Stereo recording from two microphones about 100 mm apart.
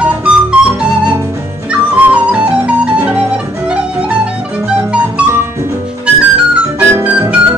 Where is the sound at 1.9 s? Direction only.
10° right (ahead or behind).